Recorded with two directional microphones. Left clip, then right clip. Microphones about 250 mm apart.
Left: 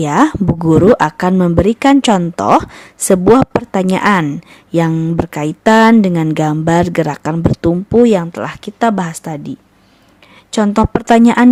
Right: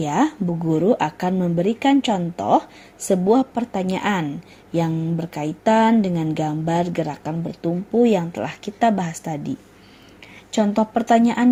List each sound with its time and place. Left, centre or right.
0.0 s a woman's voice: left